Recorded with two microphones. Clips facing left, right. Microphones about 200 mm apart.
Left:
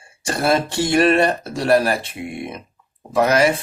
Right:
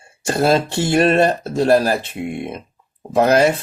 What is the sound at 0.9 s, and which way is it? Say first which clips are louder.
Speech: right 1 dB; 25° right (ahead or behind).